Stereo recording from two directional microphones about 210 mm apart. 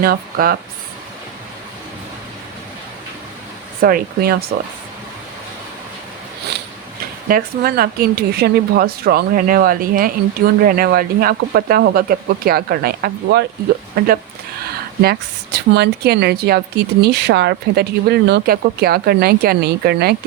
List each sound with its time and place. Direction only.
0.0 s speech: 45° right (ahead or behind)
3.8 s speech: 45° right (ahead or behind)
7.3 s speech: 45° right (ahead or behind)
15.7 s speech: 50° right (ahead or behind)